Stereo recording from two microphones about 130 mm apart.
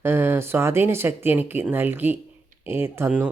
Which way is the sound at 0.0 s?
15° right (ahead or behind).